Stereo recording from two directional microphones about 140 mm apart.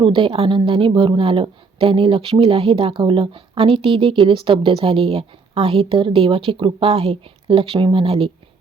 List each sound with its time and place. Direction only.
0.0 s speech: 40° right (ahead or behind)